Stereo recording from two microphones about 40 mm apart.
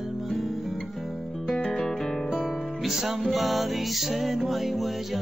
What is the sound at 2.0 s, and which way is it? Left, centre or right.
Music, centre.